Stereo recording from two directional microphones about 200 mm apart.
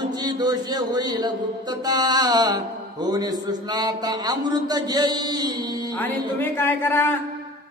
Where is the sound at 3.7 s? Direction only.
20° right (ahead or behind).